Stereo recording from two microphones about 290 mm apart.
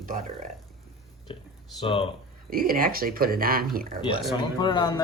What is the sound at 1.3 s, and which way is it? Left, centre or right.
Speech, centre.